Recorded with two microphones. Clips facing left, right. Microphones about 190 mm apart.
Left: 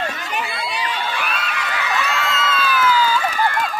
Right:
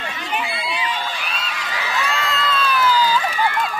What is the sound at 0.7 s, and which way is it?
Crowd, 50° left (ahead or behind).